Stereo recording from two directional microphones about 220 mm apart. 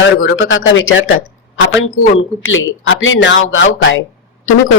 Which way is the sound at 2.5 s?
60° left (ahead or behind).